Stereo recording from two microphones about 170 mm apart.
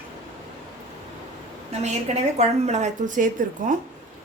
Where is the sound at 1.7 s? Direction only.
40° right (ahead or behind).